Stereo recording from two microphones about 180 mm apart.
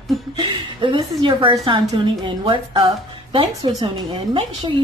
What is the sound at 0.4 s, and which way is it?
A woman's voice, 25° right (ahead or behind).